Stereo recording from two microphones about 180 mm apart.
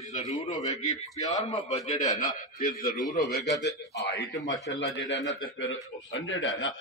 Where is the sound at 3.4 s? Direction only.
70° left (ahead or behind).